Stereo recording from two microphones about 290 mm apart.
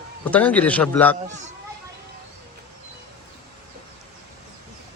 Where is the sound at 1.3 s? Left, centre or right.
Right.